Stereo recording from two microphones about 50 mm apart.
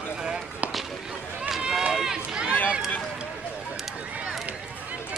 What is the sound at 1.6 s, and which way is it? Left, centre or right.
Run, centre.